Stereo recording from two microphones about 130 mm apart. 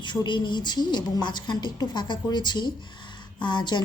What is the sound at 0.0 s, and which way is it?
A woman's voice, 35° left (ahead or behind).